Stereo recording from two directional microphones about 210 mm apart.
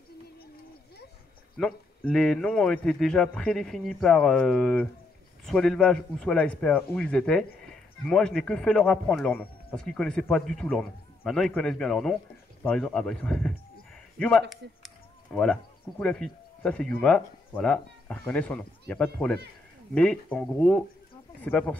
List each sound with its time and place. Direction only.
1.6 s a man's voice: 5° left (ahead or behind)
14.6 s speech: 55° right (ahead or behind)
15.3 s a man's voice: 5° left (ahead or behind)